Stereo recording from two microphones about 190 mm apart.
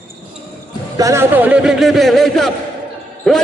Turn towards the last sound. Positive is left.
turn(degrees=0)  # may be behind; listen again after turning